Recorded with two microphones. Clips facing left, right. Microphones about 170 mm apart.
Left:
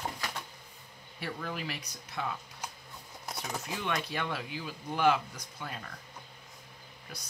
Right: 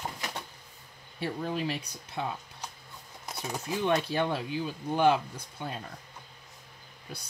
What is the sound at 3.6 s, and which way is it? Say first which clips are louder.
Speech: right 9 dB; 30° right (ahead or behind).